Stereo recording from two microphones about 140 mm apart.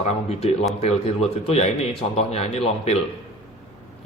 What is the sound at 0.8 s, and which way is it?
A man's voice, 50° left (ahead or behind).